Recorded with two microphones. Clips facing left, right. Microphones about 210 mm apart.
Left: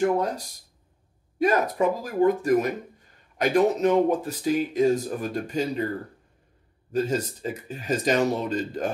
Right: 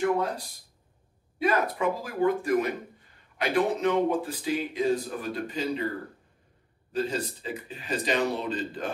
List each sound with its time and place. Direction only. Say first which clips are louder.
0.0 s speech: left 3 dB; 45° left (ahead or behind)
6.9 s speech: left 4 dB; 45° left (ahead or behind)